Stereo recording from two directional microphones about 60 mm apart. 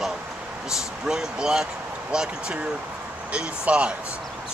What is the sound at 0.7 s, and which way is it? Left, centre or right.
Speech, centre.